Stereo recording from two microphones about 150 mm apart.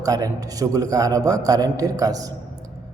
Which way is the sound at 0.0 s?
25° right (ahead or behind).